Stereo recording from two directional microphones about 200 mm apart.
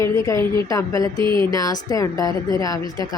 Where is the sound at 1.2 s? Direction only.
25° right (ahead or behind).